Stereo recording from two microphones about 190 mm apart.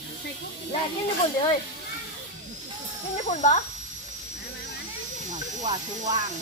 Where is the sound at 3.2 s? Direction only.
40° left (ahead or behind).